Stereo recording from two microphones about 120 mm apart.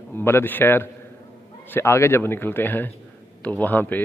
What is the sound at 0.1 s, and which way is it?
A man's voice, 20° left (ahead or behind).